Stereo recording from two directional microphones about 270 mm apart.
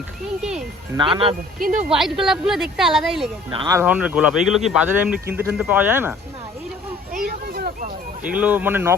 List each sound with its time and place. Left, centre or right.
0.9 s speech: centre
2.0 s speech: centre
3.5 s speech: centre
7.1 s a sound: right
8.2 s speech: centre